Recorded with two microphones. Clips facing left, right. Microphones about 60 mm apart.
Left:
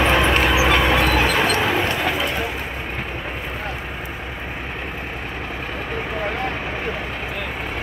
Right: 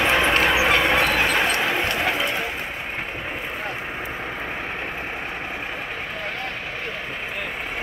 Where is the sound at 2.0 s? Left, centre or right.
Right.